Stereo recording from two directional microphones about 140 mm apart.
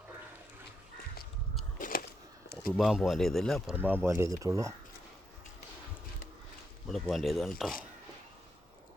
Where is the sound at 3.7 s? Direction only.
15° right (ahead or behind).